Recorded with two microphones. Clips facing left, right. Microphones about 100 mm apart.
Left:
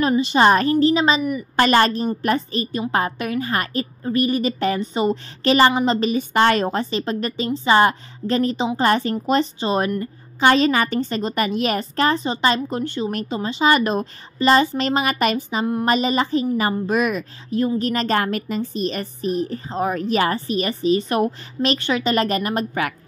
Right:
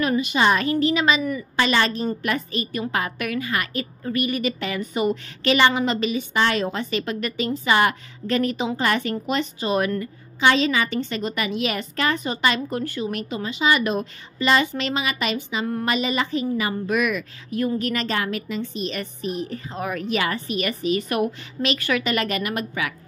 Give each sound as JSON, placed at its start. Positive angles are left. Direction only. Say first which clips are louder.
{"t": 0.1, "sound": "a woman's voice", "louder": "left 4 dB", "side_deg": 30}
{"t": 0.4, "sound": "a woman's voice", "louder": "left 5 dB", "side_deg": 40}
{"t": 1.6, "sound": "a woman's voice", "louder": "left 5 dB", "side_deg": 45}
{"t": 2.2, "sound": "a woman's voice", "louder": "left 4 dB", "side_deg": 35}
{"t": 10.4, "sound": "a woman's voice", "louder": "left 3 dB", "side_deg": 45}
{"t": 13.1, "sound": "a woman's voice", "louder": "left 3 dB", "side_deg": 35}